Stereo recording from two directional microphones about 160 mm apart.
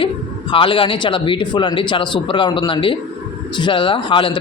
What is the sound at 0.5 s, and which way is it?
A man's voice, 35° left (ahead or behind).